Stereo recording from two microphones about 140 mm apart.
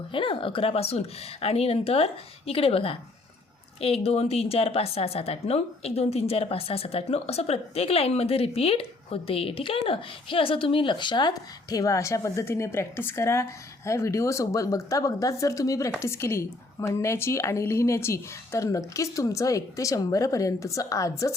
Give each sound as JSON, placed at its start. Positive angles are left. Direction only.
{"t": 0.1, "sound": "a woman's voice", "side_deg": 40}